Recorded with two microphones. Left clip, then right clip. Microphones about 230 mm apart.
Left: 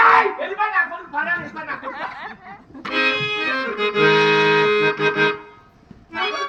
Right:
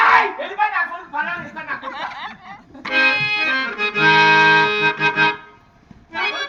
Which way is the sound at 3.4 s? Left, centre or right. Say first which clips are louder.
Right 2 dB; right.